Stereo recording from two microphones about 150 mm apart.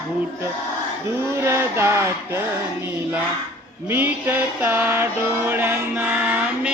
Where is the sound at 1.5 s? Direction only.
15° right (ahead or behind).